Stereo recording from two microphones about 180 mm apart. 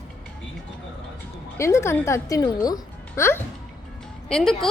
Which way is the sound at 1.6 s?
15° left (ahead or behind).